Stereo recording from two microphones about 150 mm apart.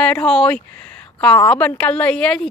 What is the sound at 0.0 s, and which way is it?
A woman's voice, 5° left (ahead or behind).